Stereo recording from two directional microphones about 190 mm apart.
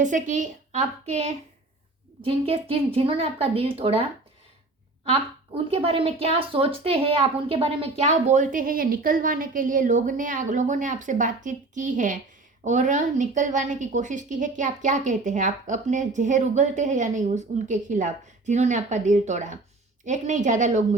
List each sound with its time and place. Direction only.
0.0 s a woman's voice: 40° right (ahead or behind)
5.6 s a woman's voice: 30° right (ahead or behind)